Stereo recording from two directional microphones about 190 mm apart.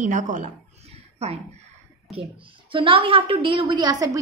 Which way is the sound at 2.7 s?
30° right (ahead or behind).